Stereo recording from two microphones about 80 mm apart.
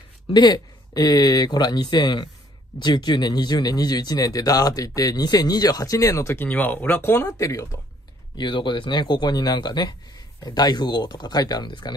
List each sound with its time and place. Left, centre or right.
0.3 s speech: left
6.3 s speech: left
7.2 s speech: left
8.4 s speech: left